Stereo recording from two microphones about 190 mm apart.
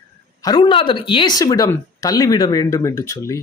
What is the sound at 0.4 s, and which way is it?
A man's voice, 25° left (ahead or behind).